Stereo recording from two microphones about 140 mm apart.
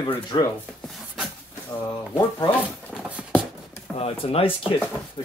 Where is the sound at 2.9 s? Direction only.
5° right (ahead or behind).